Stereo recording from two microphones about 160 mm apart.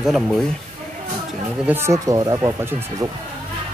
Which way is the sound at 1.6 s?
15° right (ahead or behind).